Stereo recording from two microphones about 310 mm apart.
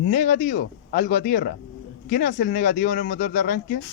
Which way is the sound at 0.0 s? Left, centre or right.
Left.